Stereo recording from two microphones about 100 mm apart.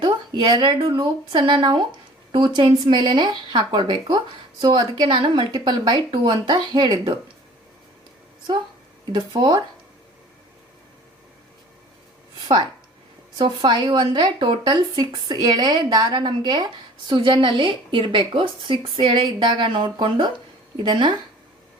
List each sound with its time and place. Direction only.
0.0 s speech: 50° right (ahead or behind)
9.1 s speech: 50° right (ahead or behind)
13.4 s speech: 50° right (ahead or behind)
17.1 s a woman's voice: 55° right (ahead or behind)